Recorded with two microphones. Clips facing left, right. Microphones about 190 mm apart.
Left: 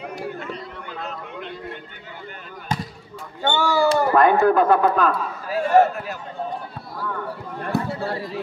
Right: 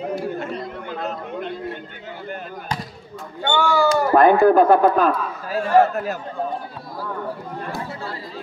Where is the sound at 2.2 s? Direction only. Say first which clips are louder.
Right 9 dB; 45° right (ahead or behind).